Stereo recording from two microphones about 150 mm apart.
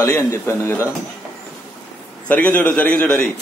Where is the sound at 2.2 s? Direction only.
10° left (ahead or behind).